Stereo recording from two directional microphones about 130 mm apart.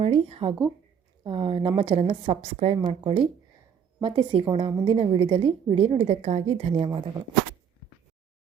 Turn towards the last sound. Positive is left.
turn(degrees=-40)  # may be behind; listen again after turning